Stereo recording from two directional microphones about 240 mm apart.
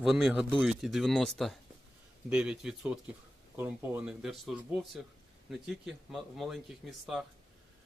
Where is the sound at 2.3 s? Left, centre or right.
Centre.